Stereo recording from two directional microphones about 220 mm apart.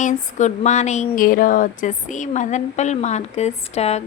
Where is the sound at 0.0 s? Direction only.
35° left (ahead or behind).